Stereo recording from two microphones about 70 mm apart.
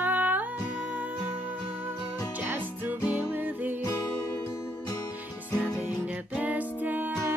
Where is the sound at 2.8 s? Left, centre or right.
Right.